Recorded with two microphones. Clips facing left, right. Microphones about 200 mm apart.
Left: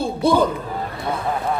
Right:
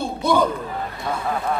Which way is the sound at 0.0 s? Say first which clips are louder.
Left 3 dB; 30° left (ahead or behind).